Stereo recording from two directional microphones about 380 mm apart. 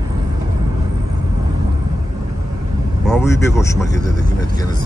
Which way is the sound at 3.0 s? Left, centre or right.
Centre.